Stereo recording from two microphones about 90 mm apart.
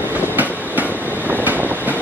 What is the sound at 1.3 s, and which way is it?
Train, 20° right (ahead or behind).